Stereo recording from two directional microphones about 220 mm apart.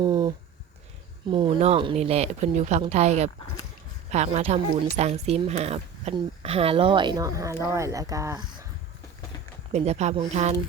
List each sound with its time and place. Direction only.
0.0 s speech: 20° right (ahead or behind)
9.7 s speech: 30° right (ahead or behind)